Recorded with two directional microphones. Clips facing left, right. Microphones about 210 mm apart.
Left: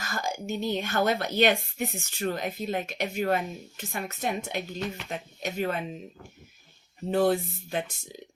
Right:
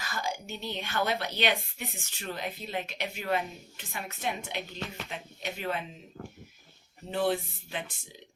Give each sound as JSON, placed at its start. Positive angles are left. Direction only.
{"t": 0.0, "sound": "a woman's voice", "side_deg": 45}
{"t": 7.1, "sound": "a woman's voice", "side_deg": 45}